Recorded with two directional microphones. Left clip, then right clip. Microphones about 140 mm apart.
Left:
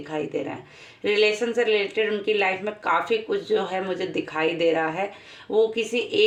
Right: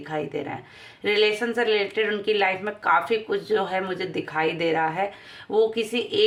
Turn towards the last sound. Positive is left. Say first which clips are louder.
# left 1 dB
turn(degrees=-30)  # may be behind; listen again after turning